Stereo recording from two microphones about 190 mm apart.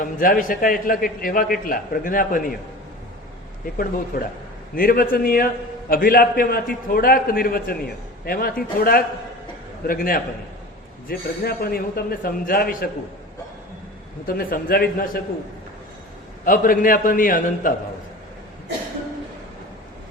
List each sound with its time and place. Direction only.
0.0 s a man's voice: 45° left (ahead or behind)
3.8 s a man's voice: 50° left (ahead or behind)
14.3 s a man's voice: 50° left (ahead or behind)
16.5 s a man's voice: 45° left (ahead or behind)